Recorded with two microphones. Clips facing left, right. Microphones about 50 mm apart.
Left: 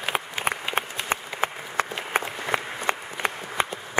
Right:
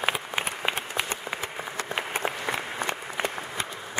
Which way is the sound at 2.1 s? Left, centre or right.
Left.